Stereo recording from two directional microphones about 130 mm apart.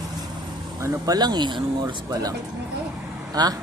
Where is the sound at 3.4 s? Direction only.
30° right (ahead or behind).